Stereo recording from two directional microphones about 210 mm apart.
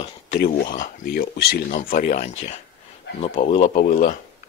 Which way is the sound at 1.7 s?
35° left (ahead or behind).